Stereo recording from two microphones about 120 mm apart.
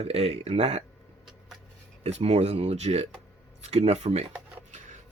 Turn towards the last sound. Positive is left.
turn(degrees=-60)  # may be behind; listen again after turning